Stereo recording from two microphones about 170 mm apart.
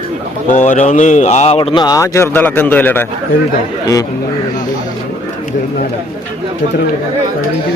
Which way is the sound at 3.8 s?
20° left (ahead or behind).